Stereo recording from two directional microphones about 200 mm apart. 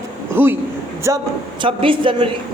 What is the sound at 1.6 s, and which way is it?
Speech, 25° right (ahead or behind).